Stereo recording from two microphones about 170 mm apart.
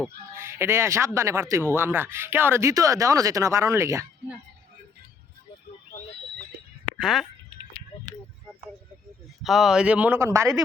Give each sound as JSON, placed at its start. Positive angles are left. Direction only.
{"t": 0.3, "sound": "speech", "side_deg": -15}
{"t": 6.8, "sound": "a sound", "side_deg": 0}
{"t": 9.4, "sound": "speech", "side_deg": 0}